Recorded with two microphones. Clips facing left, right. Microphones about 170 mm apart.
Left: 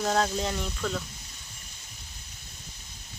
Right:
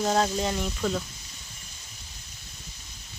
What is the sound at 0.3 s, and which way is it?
Speech, 5° right (ahead or behind).